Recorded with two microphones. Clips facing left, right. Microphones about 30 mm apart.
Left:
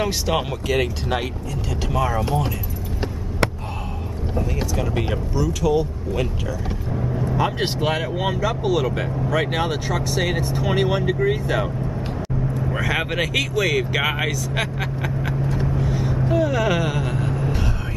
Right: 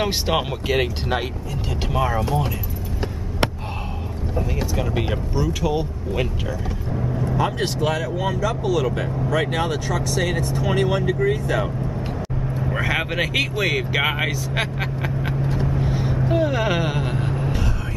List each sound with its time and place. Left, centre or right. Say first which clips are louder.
0.3 s speech: even; centre
4.7 s speech: even; centre
5.3 s speech: left 3 dB; centre
6.9 s vehicle: even; centre
7.3 s speech: left 1 dB; centre
7.6 s speech: even; left; by 11.7 s centre
13.6 s speech: left 3 dB; centre
15.0 s vehicle: left 1 dB; right
15.5 s vehicle: even; centre
15.8 s vehicle: even; centre
16.3 s speech: left 1 dB; right